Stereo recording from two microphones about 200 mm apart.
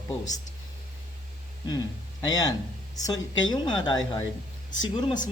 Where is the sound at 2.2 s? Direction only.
20° left (ahead or behind).